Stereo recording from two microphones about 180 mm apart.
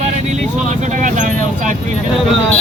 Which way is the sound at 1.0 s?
45° right (ahead or behind).